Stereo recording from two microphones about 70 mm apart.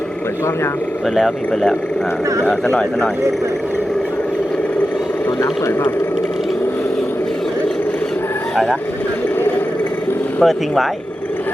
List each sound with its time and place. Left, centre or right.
1.1 s speech: centre
10.4 s speech: centre